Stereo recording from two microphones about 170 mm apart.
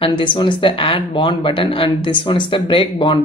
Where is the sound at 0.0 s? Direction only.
30° left (ahead or behind).